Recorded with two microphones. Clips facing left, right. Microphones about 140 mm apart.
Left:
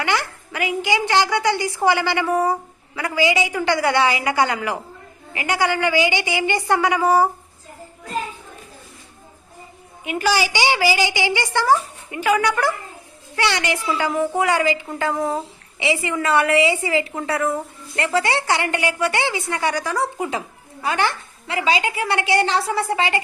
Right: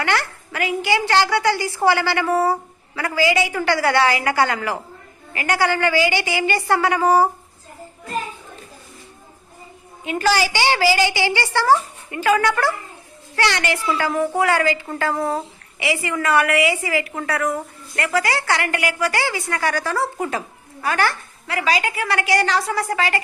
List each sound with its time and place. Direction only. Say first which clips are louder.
0.0 s a woman's voice: right 1 dB; 15° left (ahead or behind)
10.0 s a woman's voice: right 1 dB; 15° left (ahead or behind)